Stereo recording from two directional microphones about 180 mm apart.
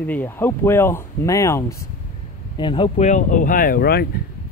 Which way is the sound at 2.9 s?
40° left (ahead or behind).